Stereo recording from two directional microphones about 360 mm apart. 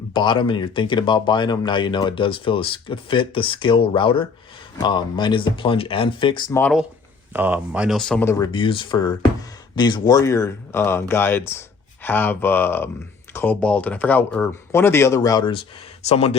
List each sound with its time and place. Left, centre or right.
0.1 s speech: centre